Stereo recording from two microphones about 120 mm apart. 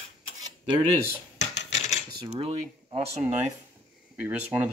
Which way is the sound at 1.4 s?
70° left (ahead or behind).